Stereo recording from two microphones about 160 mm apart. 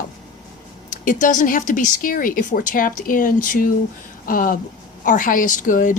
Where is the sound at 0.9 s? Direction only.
55° left (ahead or behind).